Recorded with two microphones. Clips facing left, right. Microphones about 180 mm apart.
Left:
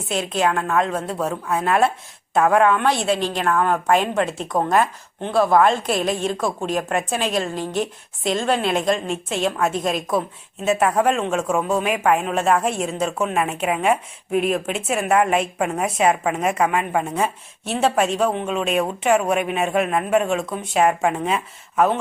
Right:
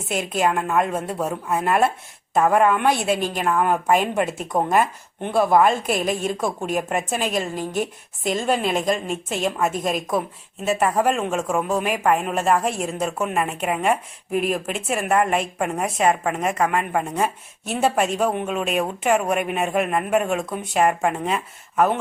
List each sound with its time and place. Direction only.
0.1 s a woman's voice: 10° right (ahead or behind)